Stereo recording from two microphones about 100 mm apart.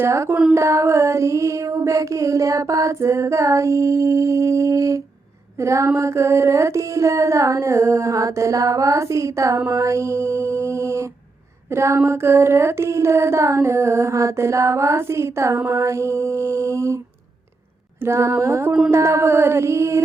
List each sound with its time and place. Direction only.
0.0 s music: 25° right (ahead or behind)
0.5 s female singing: 30° right (ahead or behind)
5.5 s music: 30° right (ahead or behind)
18.0 s music: 25° right (ahead or behind)